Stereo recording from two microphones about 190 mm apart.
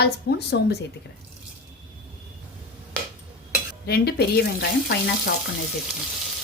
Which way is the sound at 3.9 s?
55° left (ahead or behind).